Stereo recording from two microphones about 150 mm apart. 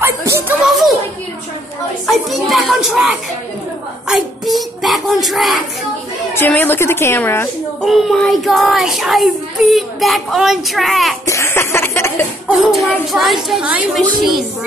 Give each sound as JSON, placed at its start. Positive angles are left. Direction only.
{"t": 0.0, "sound": "a sound", "side_deg": -15}
{"t": 0.7, "sound": "speech", "side_deg": 0}
{"t": 2.0, "sound": "speech", "side_deg": 0}
{"t": 6.3, "sound": "a woman's voice", "side_deg": 15}
{"t": 7.8, "sound": "speech", "side_deg": 0}
{"t": 11.2, "sound": "chuckle", "side_deg": 20}
{"t": 12.4, "sound": "speech", "side_deg": 0}